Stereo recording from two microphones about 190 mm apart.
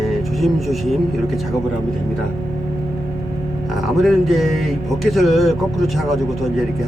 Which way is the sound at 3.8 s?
Centre (ahead or behind).